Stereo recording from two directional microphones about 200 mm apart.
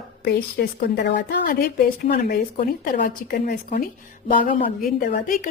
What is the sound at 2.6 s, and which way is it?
A woman's voice, 45° left (ahead or behind).